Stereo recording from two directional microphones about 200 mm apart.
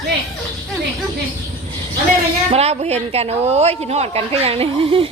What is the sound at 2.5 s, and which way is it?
A woman's voice, 30° right (ahead or behind).